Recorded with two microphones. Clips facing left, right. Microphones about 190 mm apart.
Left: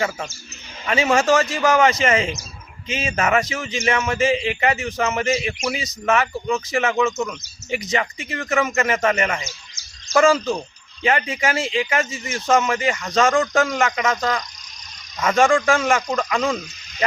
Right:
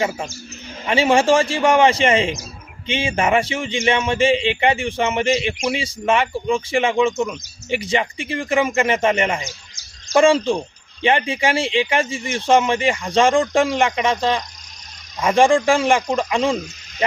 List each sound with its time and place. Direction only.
0.0 s a man's voice: 10° right (ahead or behind)
0.9 s speech: 30° right (ahead or behind)